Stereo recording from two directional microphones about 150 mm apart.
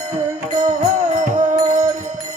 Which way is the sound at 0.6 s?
55° right (ahead or behind).